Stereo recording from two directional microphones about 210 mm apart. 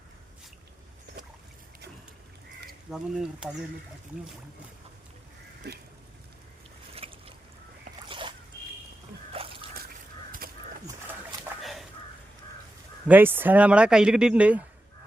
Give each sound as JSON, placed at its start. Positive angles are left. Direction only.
{"t": 2.9, "sound": "speech", "side_deg": 0}
{"t": 5.6, "sound": "duck", "side_deg": -50}
{"t": 6.9, "sound": "boat", "side_deg": -25}
{"t": 9.3, "sound": "drip", "side_deg": -25}
{"t": 10.4, "sound": "a sound", "side_deg": -45}
{"t": 11.6, "sound": "a sound", "side_deg": 0}
{"t": 13.1, "sound": "speech", "side_deg": -10}